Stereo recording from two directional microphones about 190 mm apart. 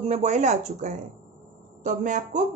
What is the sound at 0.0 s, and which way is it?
A woman's voice, 35° right (ahead or behind).